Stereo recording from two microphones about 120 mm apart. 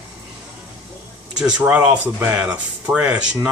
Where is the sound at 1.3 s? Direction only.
10° right (ahead or behind).